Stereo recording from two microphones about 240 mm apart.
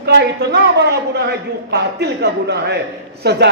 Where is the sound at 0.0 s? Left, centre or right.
Right.